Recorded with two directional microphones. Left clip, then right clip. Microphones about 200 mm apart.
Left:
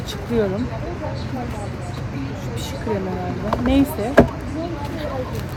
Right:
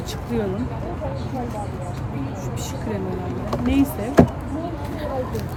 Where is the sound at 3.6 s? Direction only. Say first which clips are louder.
Left 2 dB; 20° left (ahead or behind).